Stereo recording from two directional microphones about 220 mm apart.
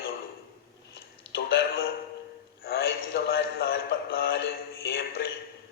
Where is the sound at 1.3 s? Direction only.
45° left (ahead or behind).